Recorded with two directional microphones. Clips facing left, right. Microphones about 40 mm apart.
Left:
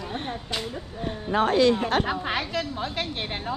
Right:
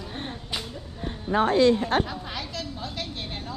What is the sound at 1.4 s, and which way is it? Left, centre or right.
A woman's voice, left.